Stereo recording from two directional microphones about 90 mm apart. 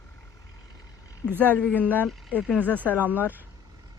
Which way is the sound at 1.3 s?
20° right (ahead or behind).